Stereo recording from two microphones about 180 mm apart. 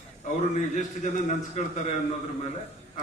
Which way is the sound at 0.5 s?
45° left (ahead or behind).